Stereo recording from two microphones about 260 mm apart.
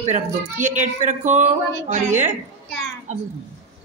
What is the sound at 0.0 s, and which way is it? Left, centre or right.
Speech, right.